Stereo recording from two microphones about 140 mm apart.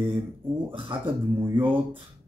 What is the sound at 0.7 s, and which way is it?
Speech, 35° right (ahead or behind).